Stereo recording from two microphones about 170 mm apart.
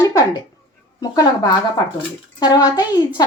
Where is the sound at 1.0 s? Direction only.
20° left (ahead or behind).